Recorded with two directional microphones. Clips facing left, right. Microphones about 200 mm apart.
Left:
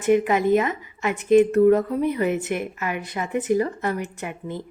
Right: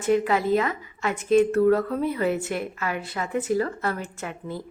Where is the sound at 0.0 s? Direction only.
15° left (ahead or behind).